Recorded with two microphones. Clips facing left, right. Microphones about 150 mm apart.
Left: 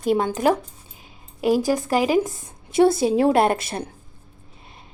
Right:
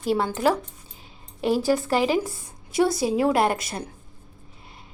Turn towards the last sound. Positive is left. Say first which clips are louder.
# left 3 dB
turn(degrees=25)  # may be behind; listen again after turning